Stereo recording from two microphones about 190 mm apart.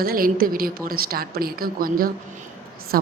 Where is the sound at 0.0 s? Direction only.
50° right (ahead or behind).